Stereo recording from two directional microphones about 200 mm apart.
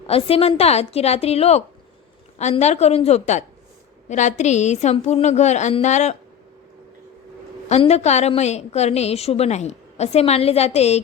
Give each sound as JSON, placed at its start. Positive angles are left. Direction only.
{"t": 0.1, "sound": "a woman's voice", "side_deg": 30}
{"t": 7.7, "sound": "a woman's voice", "side_deg": 30}